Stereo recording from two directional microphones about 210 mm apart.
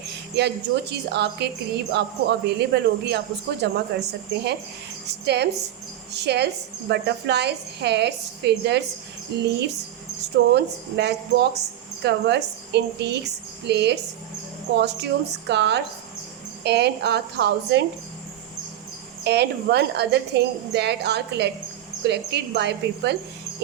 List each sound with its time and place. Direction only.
0.3 s a woman's voice: 50° right (ahead or behind)
19.2 s a woman's voice: 55° right (ahead or behind)